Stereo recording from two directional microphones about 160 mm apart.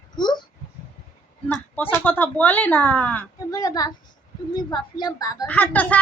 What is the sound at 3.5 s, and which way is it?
Speech, 25° left (ahead or behind).